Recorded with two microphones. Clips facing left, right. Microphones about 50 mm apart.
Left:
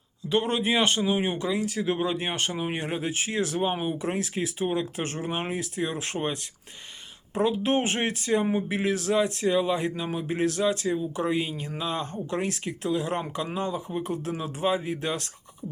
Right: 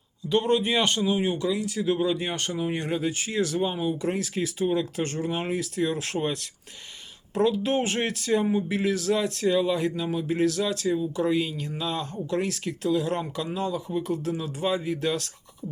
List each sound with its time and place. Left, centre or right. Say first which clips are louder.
0.4 s speech: right 2 dB; centre
0.9 s speech: even; left
3.7 s speech: even; left
3.9 s speech: right 1 dB; left